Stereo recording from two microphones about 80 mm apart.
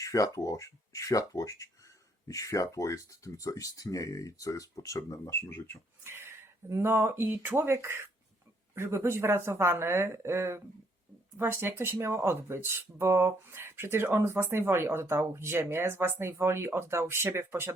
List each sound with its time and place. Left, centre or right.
0.0 s speech: left
5.3 s speech: left
6.0 s speech: right